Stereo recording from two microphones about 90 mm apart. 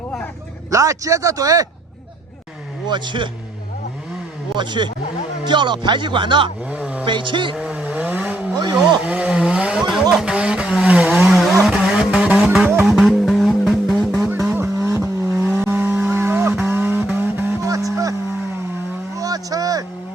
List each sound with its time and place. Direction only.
0.7 s speech: 35° right (ahead or behind)
2.9 s speech: 60° right (ahead or behind)
4.5 s speech: 60° right (ahead or behind)
6.7 s vehicle: 15° right (ahead or behind)
7.0 s speech: 65° right (ahead or behind)
7.6 s vehicle: 15° right (ahead or behind)
11.1 s vehicle: 5° right (ahead or behind)
14.8 s vehicle: 25° right (ahead or behind)
17.7 s vehicle: 40° right (ahead or behind)
19.1 s vehicle: 40° right (ahead or behind)